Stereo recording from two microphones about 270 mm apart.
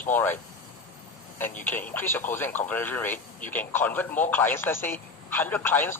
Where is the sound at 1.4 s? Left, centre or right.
Centre.